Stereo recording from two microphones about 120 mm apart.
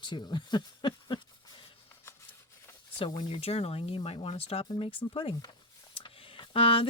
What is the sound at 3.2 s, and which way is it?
Speech, 50° left (ahead or behind).